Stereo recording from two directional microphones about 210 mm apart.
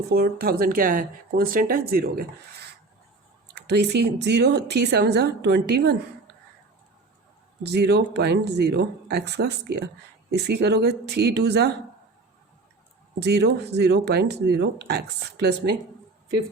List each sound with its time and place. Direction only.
0.1 s speech: 45° right (ahead or behind)
7.6 s speech: 50° right (ahead or behind)
13.1 s speech: 50° right (ahead or behind)